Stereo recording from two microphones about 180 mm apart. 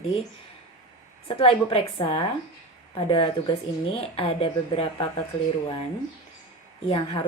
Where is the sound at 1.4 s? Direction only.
30° left (ahead or behind).